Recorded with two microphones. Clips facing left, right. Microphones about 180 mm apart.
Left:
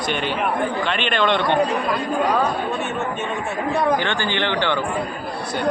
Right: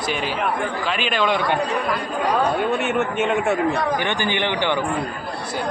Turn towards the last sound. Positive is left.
turn(degrees=-15)  # may be behind; listen again after turning